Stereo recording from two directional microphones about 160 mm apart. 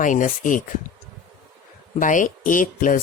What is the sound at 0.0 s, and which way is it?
Speech, 55° left (ahead or behind).